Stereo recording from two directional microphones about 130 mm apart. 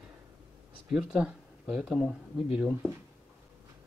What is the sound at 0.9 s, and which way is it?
Speech, 5° right (ahead or behind).